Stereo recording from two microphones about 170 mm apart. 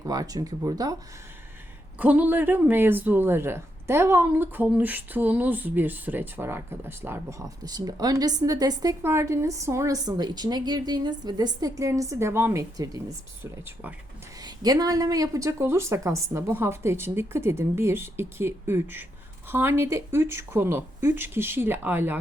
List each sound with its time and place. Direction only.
0.0 s speech: 20° right (ahead or behind)
2.0 s speech: 10° right (ahead or behind)